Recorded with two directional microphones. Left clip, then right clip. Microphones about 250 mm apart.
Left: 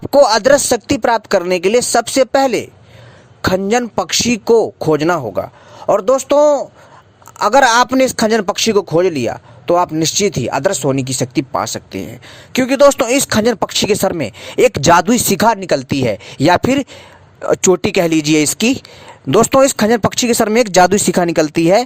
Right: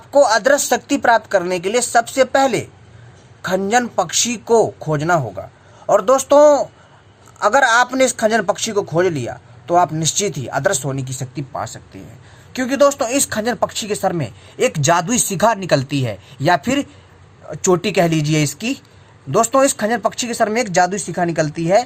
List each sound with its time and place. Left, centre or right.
0.1 s a man's voice: left